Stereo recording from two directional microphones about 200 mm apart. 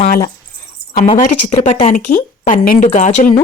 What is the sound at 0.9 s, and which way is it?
Speech, 35° left (ahead or behind).